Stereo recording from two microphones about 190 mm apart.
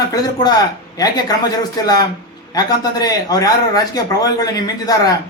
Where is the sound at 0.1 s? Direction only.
20° left (ahead or behind).